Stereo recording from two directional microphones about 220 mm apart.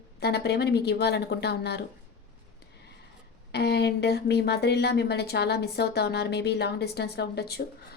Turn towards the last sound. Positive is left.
turn(degrees=45)  # may be behind; listen again after turning